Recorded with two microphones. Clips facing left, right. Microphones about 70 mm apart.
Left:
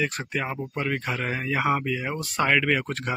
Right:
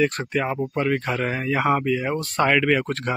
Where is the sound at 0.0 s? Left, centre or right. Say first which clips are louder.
Right 6 dB; centre.